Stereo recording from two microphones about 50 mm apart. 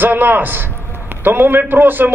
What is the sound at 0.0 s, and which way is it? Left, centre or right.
A man's voice, right.